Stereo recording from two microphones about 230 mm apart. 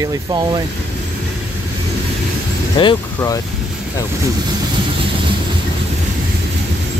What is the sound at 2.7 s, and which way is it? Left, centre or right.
Speech, centre.